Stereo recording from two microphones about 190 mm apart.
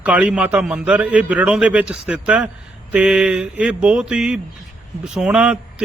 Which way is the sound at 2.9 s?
5° right (ahead or behind).